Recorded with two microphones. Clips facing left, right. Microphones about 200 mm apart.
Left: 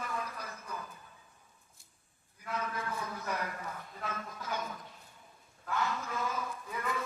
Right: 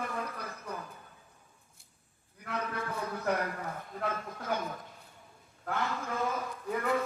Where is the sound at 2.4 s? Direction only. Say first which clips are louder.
Right 2 dB; 60° right (ahead or behind).